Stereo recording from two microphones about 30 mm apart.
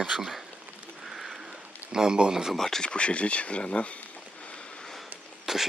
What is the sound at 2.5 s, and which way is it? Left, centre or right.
Speech, centre.